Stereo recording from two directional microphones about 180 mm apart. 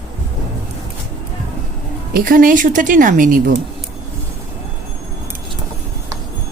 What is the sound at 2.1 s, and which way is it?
A woman's voice, 50° right (ahead or behind).